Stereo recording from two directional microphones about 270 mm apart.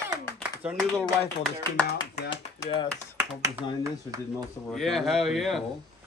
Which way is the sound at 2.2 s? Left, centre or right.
Centre.